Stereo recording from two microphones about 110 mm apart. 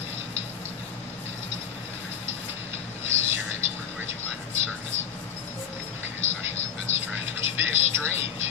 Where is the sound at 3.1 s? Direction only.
25° right (ahead or behind).